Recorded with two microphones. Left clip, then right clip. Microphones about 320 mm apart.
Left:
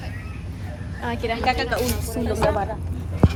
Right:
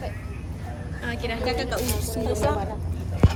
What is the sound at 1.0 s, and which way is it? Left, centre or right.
Speech, centre.